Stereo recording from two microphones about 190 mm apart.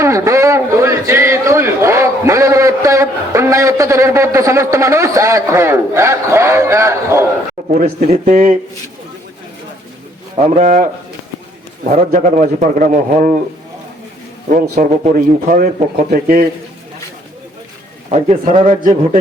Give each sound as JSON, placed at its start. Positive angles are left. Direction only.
{"t": 0.0, "sound": "a sound", "side_deg": -15}
{"t": 7.7, "sound": "a man's voice", "side_deg": -40}
{"t": 10.4, "sound": "a man's voice", "side_deg": -40}
{"t": 11.9, "sound": "speech", "side_deg": -40}
{"t": 14.8, "sound": "speech", "side_deg": -45}
{"t": 18.1, "sound": "a man's voice", "side_deg": -35}